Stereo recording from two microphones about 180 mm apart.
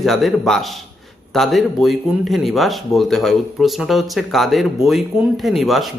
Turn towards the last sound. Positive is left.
turn(degrees=0)  # may be behind; listen again after turning